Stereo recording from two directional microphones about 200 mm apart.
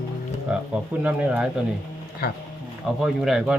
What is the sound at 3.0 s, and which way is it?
Speech, centre (ahead or behind).